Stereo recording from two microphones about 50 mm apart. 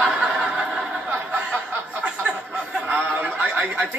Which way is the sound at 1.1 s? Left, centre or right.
Right.